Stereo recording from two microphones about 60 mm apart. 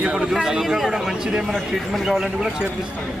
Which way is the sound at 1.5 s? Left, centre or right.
Centre.